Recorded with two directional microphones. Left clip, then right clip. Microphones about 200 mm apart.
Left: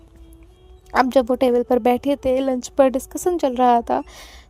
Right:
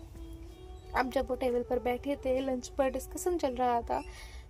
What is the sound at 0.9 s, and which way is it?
A woman's voice, 45° left (ahead or behind).